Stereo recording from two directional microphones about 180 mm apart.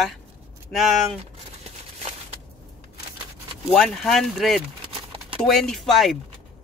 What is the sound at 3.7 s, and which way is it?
Speech, centre (ahead or behind).